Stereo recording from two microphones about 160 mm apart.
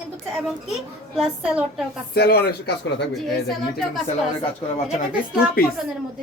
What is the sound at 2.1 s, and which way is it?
Speech, 85° left.